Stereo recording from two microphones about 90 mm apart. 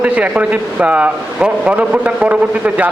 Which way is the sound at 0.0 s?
15° right (ahead or behind).